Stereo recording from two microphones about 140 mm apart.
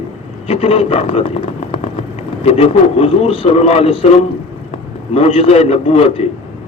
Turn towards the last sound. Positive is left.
turn(degrees=45)  # may be behind; listen again after turning